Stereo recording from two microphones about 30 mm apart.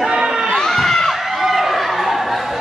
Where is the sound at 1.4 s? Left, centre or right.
Centre.